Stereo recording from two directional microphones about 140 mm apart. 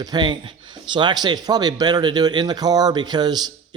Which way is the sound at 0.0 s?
30° right (ahead or behind).